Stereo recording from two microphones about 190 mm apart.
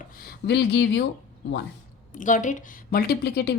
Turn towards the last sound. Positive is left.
turn(degrees=60)  # may be behind; listen again after turning